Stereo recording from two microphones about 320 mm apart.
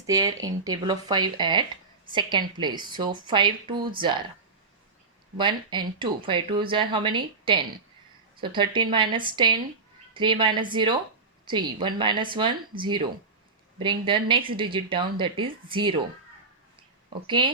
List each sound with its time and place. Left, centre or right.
0.0 s speech: centre
5.4 s speech: centre
17.2 s speech: centre